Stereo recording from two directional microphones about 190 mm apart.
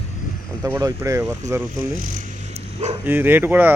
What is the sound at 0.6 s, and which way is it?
Speech, 15° right (ahead or behind).